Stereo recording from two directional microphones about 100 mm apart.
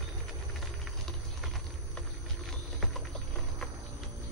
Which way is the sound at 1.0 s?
5° left (ahead or behind).